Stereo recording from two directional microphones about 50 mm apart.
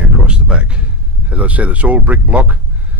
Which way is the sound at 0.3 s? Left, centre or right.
Right.